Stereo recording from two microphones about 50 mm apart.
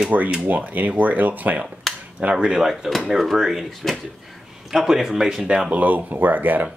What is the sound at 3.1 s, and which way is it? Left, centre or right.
Speech, centre.